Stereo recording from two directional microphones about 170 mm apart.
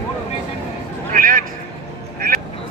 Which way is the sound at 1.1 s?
55° right (ahead or behind).